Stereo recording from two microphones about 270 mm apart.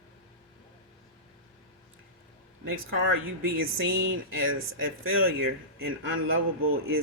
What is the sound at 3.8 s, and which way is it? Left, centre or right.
Speech, right.